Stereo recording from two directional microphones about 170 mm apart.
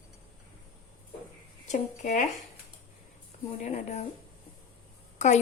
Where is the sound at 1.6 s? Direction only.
45° left (ahead or behind).